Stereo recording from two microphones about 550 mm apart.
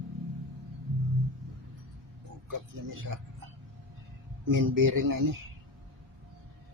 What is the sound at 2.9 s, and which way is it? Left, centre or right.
Speech, right.